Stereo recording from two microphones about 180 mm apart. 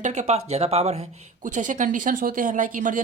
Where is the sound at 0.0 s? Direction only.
40° right (ahead or behind).